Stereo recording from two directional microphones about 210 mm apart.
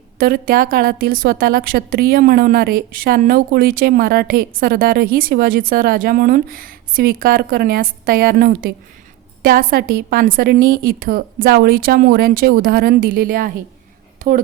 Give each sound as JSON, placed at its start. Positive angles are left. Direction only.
{"t": 0.2, "sound": "a woman's voice", "side_deg": -45}